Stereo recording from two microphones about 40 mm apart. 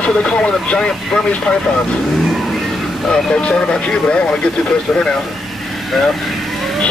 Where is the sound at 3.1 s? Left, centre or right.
Left.